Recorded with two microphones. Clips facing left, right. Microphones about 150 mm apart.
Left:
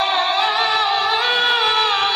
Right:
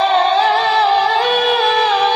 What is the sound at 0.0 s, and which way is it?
Music, 45° right (ahead or behind).